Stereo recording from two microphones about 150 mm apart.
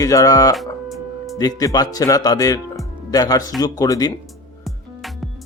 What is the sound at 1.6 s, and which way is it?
Speech, 25° left (ahead or behind).